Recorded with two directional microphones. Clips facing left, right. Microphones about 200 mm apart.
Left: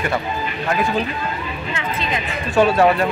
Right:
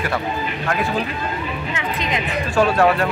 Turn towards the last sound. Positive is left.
turn(degrees=0)  # may be behind; listen again after turning